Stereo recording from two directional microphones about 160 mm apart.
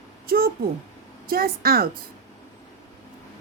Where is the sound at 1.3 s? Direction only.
70° right (ahead or behind).